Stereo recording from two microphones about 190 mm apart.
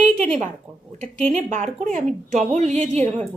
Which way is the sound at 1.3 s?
40° right (ahead or behind).